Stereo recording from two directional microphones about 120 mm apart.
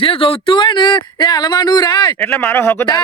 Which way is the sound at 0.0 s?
50° left (ahead or behind).